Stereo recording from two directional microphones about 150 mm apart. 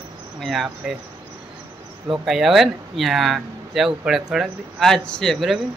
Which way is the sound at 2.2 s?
Centre (ahead or behind).